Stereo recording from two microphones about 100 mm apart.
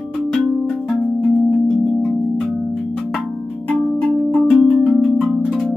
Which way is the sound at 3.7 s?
10° left (ahead or behind).